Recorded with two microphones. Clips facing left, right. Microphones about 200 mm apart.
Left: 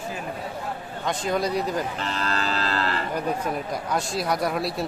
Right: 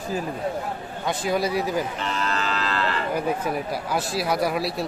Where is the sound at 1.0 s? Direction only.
5° right (ahead or behind).